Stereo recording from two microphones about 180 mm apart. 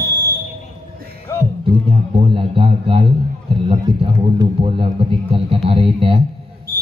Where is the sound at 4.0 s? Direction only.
30° right (ahead or behind).